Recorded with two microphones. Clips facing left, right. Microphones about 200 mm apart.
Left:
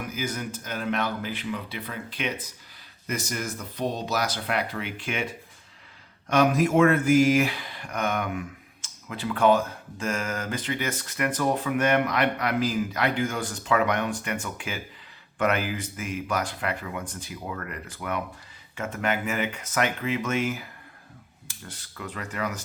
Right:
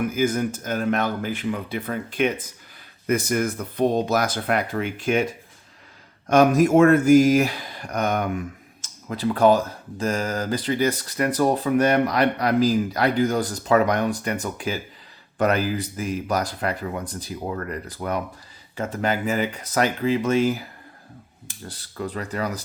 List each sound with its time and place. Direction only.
0.1 s speech: 50° right (ahead or behind); by 20.7 s 35° right (ahead or behind)
21.7 s speech: 35° right (ahead or behind)